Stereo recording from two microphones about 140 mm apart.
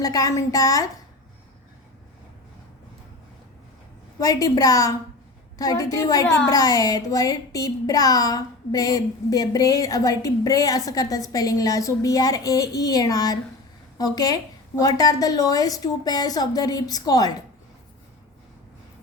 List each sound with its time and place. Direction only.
0.0 s a child's voice: 25° left (ahead or behind)
4.2 s a child's voice: 25° left (ahead or behind)